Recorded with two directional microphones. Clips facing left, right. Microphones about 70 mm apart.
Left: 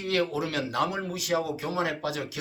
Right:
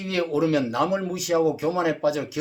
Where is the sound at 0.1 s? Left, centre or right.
Right.